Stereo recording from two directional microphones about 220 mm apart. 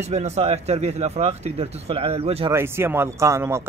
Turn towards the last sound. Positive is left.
turn(degrees=-10)  # may be behind; listen again after turning